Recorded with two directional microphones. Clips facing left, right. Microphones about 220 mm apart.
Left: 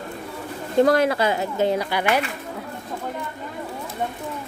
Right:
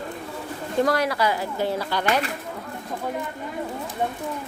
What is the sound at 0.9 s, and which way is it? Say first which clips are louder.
Speech: left 4 dB; 25° left (ahead or behind).